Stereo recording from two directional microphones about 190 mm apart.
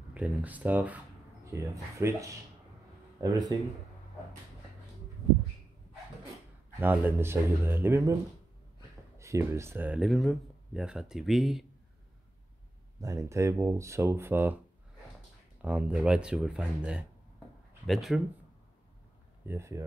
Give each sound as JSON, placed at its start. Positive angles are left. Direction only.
{"t": 0.1, "sound": "speech", "side_deg": -5}
{"t": 6.8, "sound": "speech", "side_deg": -10}
{"t": 9.2, "sound": "speech", "side_deg": -15}
{"t": 13.0, "sound": "speech", "side_deg": -15}
{"t": 15.6, "sound": "speech", "side_deg": -5}
{"t": 19.4, "sound": "speech", "side_deg": -15}